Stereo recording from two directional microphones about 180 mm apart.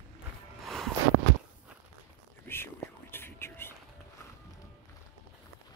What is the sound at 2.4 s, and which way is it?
Whispering, 10° left (ahead or behind).